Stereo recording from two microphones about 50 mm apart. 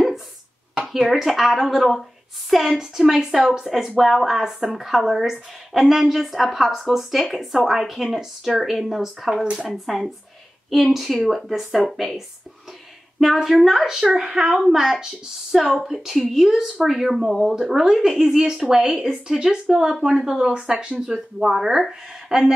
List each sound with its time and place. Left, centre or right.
0.8 s a woman's voice: centre
9.7 s a woman's voice: centre
13.2 s a woman's voice: centre
14.0 s a woman's voice: centre